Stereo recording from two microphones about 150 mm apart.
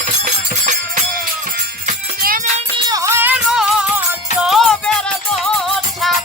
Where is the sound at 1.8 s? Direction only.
70° right (ahead or behind).